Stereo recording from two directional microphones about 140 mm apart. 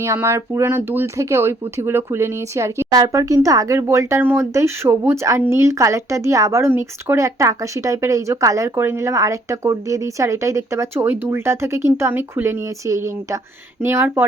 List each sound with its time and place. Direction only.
0.0 s speech: 20° right (ahead or behind)